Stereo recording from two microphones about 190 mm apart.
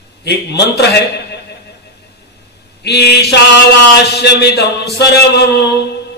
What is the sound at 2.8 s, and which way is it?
Mantra, 60° left (ahead or behind).